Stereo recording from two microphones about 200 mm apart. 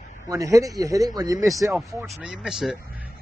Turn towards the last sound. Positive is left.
turn(degrees=-5)  # may be behind; listen again after turning